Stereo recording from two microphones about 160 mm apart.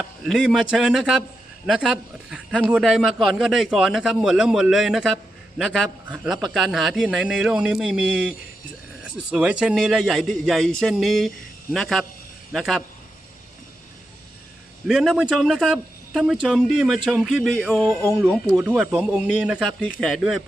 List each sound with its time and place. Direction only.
0.3 s speech: 5° right (ahead or behind)
14.8 s speech: centre (ahead or behind)
17.8 s speech: 20° right (ahead or behind)
18.2 s a man's voice: centre (ahead or behind)